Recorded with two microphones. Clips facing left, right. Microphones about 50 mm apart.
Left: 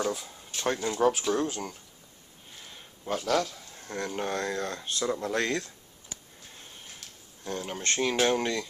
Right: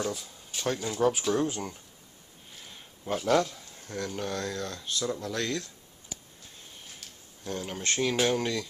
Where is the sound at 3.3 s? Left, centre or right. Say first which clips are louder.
Right 3 dB; centre.